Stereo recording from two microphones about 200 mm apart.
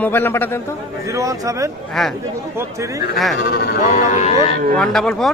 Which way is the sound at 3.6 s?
40° left (ahead or behind).